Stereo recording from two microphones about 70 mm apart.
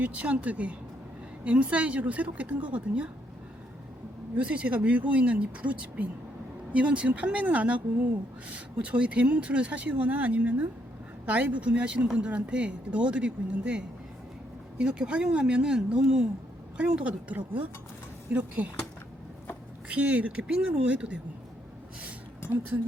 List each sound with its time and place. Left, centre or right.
0.0 s speech: centre
4.4 s speech: centre
19.9 s speech: centre